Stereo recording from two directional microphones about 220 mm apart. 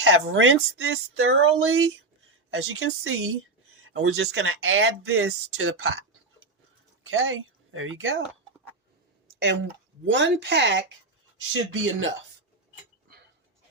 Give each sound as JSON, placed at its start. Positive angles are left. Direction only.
{"t": 0.0, "sound": "speech", "side_deg": -60}
{"t": 3.8, "sound": "a sound", "side_deg": -65}
{"t": 4.3, "sound": "speech", "side_deg": -65}
{"t": 7.0, "sound": "speech", "side_deg": -60}
{"t": 10.1, "sound": "speech", "side_deg": -55}